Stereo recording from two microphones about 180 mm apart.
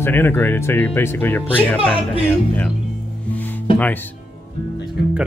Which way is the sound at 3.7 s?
10° left (ahead or behind).